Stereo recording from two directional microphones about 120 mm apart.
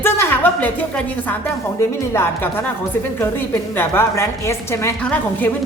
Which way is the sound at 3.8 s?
20° left (ahead or behind).